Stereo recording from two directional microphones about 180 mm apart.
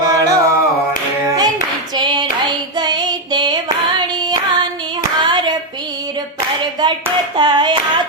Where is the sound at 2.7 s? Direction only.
25° right (ahead or behind).